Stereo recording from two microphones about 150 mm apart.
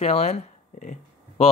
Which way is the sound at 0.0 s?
45° left (ahead or behind).